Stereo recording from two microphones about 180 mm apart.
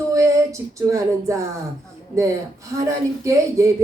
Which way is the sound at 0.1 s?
15° right (ahead or behind).